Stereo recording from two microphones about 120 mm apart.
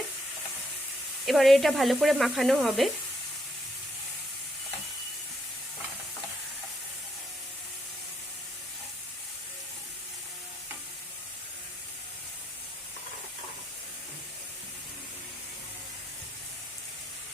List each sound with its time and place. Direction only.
1.2 s speech: centre (ahead or behind)